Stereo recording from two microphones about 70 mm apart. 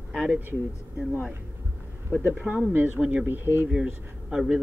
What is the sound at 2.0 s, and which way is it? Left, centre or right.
Speech, right.